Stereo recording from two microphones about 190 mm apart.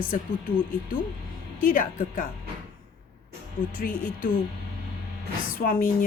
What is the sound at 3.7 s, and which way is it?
Speech, 45° left (ahead or behind).